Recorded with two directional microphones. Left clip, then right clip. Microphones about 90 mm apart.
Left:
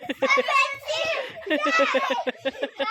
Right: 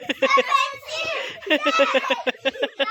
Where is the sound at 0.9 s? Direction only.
30° left (ahead or behind).